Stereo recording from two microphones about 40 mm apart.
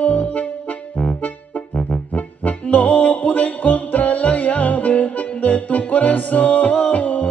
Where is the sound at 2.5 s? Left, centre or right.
Left.